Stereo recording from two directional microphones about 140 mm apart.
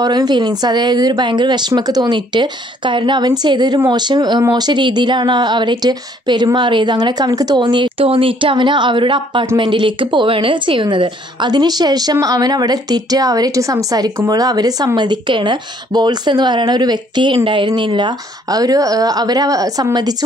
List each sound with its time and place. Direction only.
0.0 s speech: 30° right (ahead or behind)